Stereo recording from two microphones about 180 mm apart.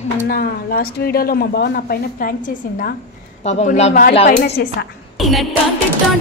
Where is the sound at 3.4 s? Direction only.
40° left (ahead or behind).